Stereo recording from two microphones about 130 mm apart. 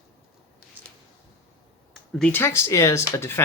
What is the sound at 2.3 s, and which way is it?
Speech, 20° left (ahead or behind).